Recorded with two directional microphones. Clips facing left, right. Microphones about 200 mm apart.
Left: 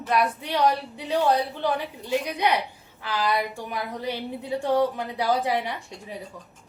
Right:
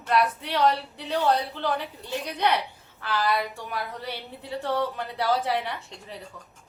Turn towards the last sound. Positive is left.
turn(degrees=10)  # may be behind; listen again after turning